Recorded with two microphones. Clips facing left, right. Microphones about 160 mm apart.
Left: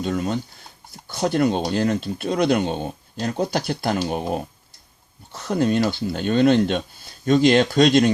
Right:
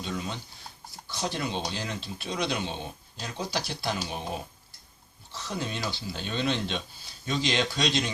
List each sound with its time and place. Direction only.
0.0 s speech: 50° left (ahead or behind)